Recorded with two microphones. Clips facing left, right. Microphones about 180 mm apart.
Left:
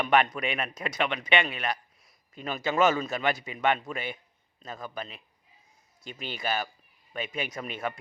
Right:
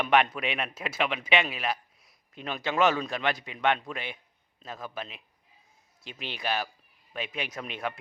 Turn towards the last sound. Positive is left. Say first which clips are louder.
# left 1 dB
turn(degrees=0)  # may be behind; listen again after turning